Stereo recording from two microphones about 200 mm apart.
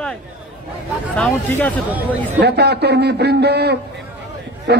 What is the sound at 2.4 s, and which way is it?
A man's voice, 55° right (ahead or behind).